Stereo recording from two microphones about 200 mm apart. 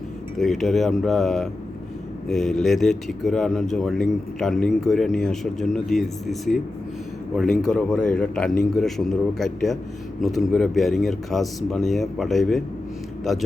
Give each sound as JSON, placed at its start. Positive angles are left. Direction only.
{"t": 0.3, "sound": "speech", "side_deg": 0}
{"t": 7.6, "sound": "speech", "side_deg": 0}